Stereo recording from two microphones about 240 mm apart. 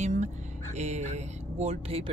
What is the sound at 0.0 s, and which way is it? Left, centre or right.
Music, right.